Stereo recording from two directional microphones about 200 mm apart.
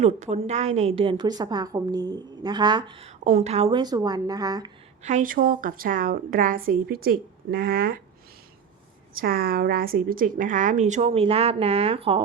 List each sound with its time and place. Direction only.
0.0 s a woman's voice: 35° right (ahead or behind); by 4.7 s 20° right (ahead or behind)
5.0 s a woman's voice: 40° right (ahead or behind)
9.2 s a woman's voice: 45° right (ahead or behind); by 12.2 s 30° right (ahead or behind)